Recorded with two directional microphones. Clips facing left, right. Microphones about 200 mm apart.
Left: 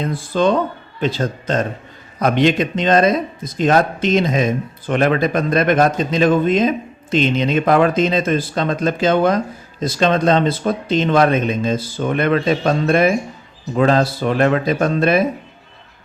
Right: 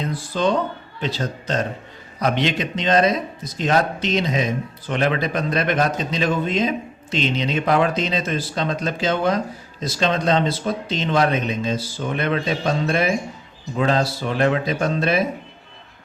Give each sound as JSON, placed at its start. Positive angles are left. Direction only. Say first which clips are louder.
{"t": 0.0, "sound": "speech", "louder": "left 5 dB", "side_deg": 50}